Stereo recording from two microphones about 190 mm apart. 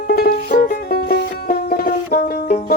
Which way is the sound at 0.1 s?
55° left (ahead or behind).